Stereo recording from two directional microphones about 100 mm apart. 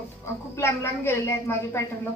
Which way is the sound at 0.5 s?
25° left (ahead or behind).